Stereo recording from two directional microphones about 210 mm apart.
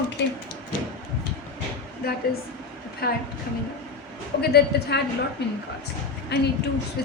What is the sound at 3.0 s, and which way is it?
Speech, 45° left (ahead or behind).